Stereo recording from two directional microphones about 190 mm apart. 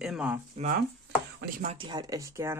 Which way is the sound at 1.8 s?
25° right (ahead or behind).